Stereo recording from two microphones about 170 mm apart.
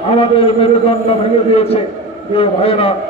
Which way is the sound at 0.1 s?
35° left (ahead or behind).